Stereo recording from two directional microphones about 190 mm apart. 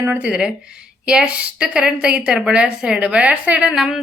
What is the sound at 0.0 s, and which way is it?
A woman's voice, 10° right (ahead or behind).